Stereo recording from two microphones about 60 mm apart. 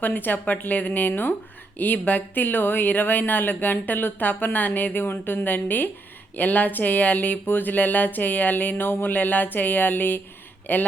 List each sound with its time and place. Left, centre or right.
0.0 s speech: left